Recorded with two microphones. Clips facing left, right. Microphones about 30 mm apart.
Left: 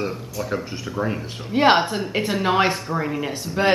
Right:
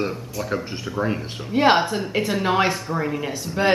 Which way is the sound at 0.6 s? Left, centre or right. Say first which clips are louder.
Right 1 dB; centre.